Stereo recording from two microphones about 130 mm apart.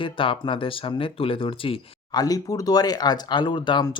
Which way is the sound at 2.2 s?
25° left (ahead or behind).